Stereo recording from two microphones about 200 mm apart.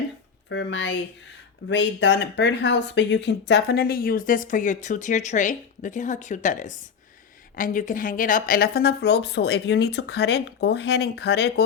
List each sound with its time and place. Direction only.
0.5 s speech: 65° left (ahead or behind)